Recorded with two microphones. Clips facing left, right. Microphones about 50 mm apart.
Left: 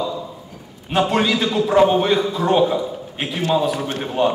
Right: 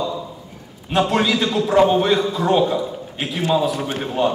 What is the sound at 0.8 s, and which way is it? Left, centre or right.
A man's voice, centre.